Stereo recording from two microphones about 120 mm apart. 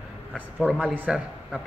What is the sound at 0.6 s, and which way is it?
Speech, 10° right (ahead or behind).